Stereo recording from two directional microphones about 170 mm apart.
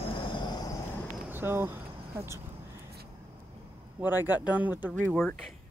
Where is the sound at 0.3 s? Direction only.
25° left (ahead or behind).